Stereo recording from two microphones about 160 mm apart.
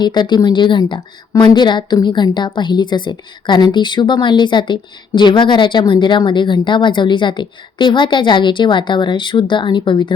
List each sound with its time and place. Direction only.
0.0 s a woman's voice: 25° left (ahead or behind)